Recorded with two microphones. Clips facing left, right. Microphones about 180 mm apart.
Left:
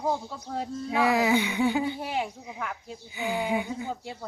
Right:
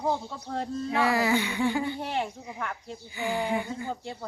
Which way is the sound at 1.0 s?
15° left (ahead or behind).